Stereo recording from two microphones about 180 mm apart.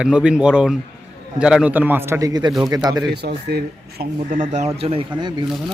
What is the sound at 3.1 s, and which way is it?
Speech, 65° right (ahead or behind).